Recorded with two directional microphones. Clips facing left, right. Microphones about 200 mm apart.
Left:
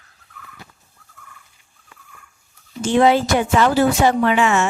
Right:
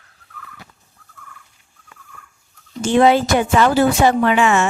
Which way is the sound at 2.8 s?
55° right (ahead or behind).